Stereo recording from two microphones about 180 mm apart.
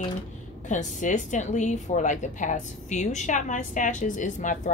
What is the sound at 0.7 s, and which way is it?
Speech, 45° left (ahead or behind).